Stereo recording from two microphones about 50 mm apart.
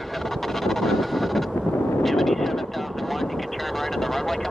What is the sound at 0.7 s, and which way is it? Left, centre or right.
Vehicle, centre.